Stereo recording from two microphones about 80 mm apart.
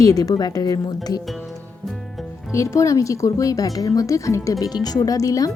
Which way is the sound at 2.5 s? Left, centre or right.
Left.